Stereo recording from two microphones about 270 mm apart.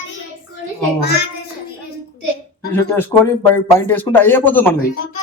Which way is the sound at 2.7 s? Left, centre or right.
Centre.